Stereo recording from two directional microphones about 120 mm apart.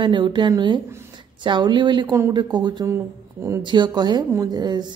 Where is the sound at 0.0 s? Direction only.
40° right (ahead or behind).